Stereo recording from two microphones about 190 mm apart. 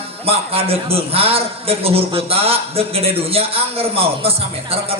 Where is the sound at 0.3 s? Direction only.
30° right (ahead or behind).